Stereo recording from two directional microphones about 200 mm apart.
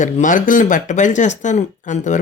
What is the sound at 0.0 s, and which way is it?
Speech, 40° left (ahead or behind).